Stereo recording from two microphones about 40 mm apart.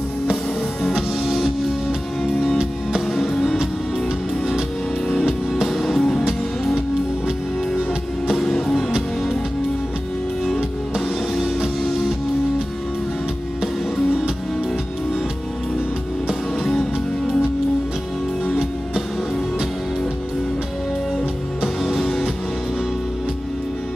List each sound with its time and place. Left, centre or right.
1.2 s music: centre
3.1 s music: centre
5.7 s music: centre
8.4 s music: centre